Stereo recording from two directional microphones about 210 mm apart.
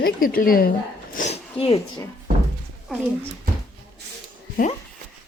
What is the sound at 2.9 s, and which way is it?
Speech, centre (ahead or behind).